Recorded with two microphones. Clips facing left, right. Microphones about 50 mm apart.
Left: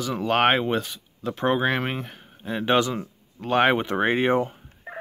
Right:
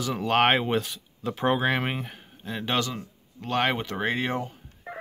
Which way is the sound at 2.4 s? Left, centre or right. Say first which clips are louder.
Left 6 dB; centre.